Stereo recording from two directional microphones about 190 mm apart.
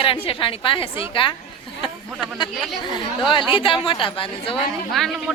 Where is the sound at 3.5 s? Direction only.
25° left (ahead or behind).